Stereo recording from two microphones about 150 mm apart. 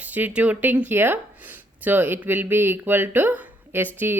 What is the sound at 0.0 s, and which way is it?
Speech, 10° right (ahead or behind).